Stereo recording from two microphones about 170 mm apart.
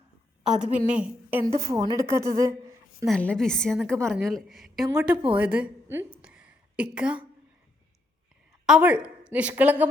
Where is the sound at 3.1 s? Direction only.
5° left (ahead or behind).